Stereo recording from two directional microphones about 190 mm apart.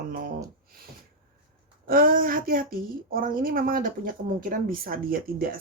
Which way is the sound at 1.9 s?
50° right (ahead or behind).